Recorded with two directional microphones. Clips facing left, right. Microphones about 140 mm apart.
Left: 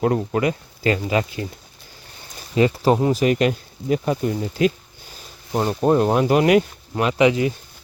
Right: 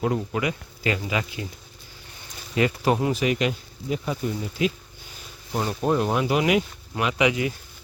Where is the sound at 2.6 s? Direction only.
30° left (ahead or behind); by 4.7 s 50° left (ahead or behind).